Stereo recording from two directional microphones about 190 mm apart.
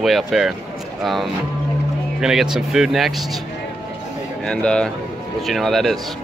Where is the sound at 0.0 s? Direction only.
Centre (ahead or behind).